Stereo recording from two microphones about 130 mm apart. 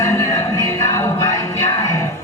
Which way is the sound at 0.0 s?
25° left (ahead or behind).